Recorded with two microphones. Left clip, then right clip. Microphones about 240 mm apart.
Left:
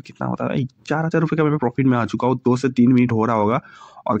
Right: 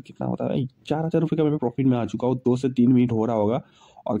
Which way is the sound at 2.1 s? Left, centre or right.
Left.